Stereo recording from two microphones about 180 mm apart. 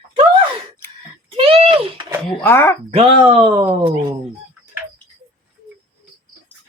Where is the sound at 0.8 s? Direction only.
15° left (ahead or behind).